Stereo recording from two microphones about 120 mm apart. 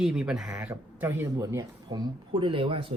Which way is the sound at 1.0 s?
20° right (ahead or behind).